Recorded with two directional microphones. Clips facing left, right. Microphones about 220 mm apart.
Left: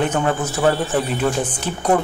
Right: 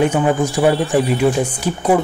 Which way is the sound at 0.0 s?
15° right (ahead or behind).